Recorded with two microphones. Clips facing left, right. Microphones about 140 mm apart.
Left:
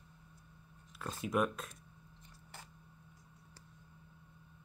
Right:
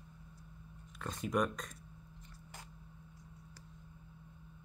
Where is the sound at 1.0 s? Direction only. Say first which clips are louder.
Even; 5° left (ahead or behind).